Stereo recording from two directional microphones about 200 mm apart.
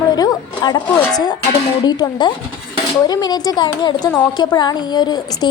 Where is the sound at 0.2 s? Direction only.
20° left (ahead or behind).